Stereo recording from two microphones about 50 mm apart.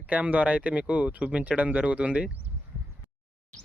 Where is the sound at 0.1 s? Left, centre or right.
Right.